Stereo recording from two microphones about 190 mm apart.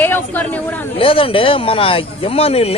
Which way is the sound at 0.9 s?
30° left (ahead or behind).